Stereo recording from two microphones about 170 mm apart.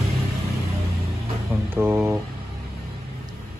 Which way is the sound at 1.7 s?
15° right (ahead or behind).